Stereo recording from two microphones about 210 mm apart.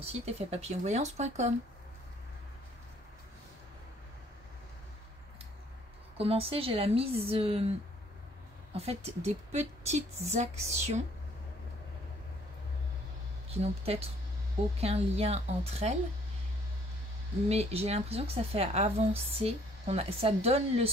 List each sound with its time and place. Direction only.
0.0 s speech: 30° right (ahead or behind)
6.1 s a woman's voice: 25° right (ahead or behind)
8.7 s speech: 30° right (ahead or behind)
13.5 s a woman's voice: 30° right (ahead or behind)
17.5 s a woman's voice: 30° right (ahead or behind)